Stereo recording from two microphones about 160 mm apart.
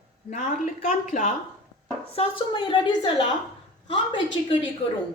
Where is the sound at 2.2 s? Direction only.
35° left (ahead or behind).